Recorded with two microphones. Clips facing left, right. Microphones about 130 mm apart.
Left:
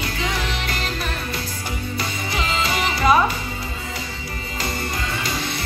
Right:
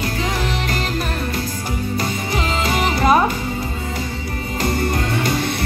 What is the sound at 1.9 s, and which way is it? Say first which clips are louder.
Music: right 4 dB; 40° right (ahead or behind).